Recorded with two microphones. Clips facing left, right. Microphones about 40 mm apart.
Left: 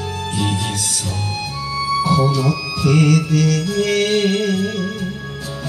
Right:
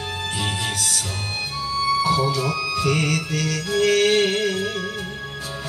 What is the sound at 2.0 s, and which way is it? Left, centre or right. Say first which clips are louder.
Music: left 4 dB; centre.